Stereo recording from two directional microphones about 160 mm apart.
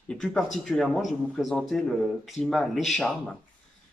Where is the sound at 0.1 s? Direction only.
5° left (ahead or behind).